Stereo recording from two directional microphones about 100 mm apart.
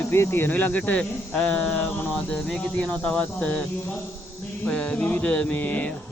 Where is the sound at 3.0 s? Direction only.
10° left (ahead or behind).